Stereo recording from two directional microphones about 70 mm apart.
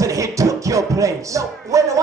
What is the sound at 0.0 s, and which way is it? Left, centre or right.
Music, right.